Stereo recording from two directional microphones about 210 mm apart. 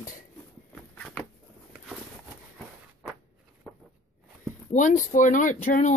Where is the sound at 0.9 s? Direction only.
5° left (ahead or behind).